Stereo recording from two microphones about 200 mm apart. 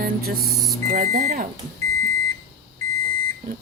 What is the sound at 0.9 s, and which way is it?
Speech, 35° right (ahead or behind).